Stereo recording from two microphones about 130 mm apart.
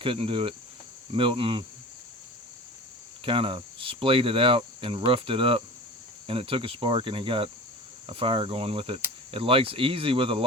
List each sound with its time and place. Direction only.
0.0 s cricket: 45° right (ahead or behind)
3.2 s cricket: 45° right (ahead or behind)